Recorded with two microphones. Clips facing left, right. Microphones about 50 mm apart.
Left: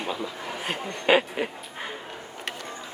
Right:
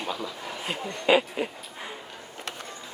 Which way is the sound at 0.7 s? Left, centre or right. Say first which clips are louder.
Left 1 dB; left.